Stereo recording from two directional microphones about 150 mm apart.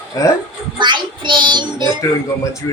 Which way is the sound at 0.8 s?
30° right (ahead or behind).